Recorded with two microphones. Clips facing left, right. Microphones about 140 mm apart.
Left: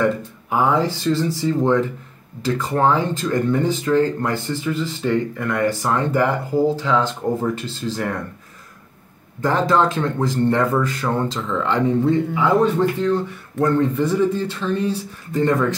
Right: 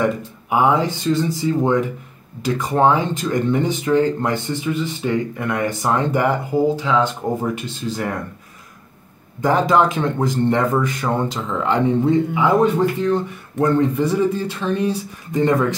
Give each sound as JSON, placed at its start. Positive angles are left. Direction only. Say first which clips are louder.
{"t": 0.0, "sound": "speech", "louder": "even", "side_deg": -15}
{"t": 7.4, "sound": "speech", "louder": "even", "side_deg": -20}
{"t": 9.4, "sound": "speech", "louder": "right 2 dB", "side_deg": -15}